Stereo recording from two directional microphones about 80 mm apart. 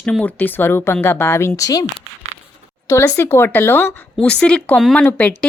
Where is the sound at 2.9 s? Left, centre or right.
Left.